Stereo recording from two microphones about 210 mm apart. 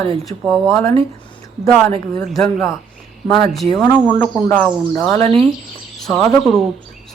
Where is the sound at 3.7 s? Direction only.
15° left (ahead or behind).